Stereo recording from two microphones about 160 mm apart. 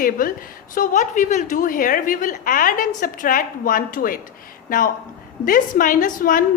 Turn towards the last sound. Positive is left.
turn(degrees=60)  # may be behind; listen again after turning